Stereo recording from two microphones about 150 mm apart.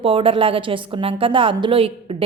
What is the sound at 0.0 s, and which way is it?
A woman's voice, 35° right (ahead or behind).